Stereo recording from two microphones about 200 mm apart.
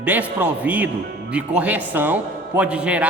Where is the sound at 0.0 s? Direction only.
5° right (ahead or behind).